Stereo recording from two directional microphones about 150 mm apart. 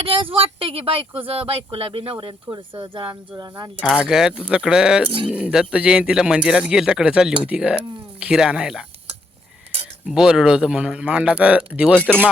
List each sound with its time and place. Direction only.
0.0 s speech: 40° right (ahead or behind)
3.9 s speech: 5° right (ahead or behind)
10.1 s speech: 5° right (ahead or behind)